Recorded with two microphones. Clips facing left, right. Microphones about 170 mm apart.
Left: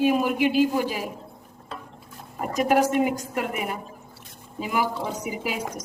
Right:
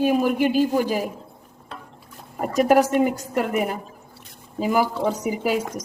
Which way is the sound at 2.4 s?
40° right (ahead or behind).